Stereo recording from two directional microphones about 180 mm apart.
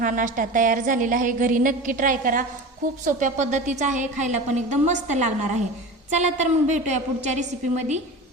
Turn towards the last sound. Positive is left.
turn(degrees=-40)  # may be behind; listen again after turning